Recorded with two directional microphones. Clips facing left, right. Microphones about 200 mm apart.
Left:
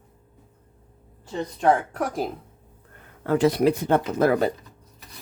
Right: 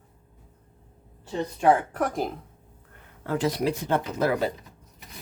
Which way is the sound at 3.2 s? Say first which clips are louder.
Left 6 dB; 60° left (ahead or behind).